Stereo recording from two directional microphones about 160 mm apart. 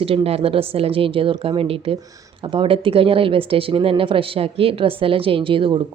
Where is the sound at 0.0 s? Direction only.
35° right (ahead or behind).